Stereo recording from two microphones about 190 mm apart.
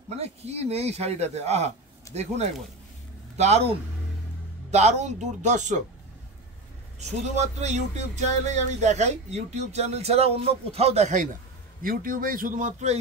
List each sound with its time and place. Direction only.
0.1 s speech: 35° right (ahead or behind)
7.0 s speech: 35° right (ahead or behind)
11.8 s speech: 45° right (ahead or behind)